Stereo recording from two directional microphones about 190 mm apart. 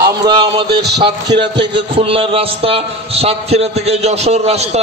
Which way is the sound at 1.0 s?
25° right (ahead or behind).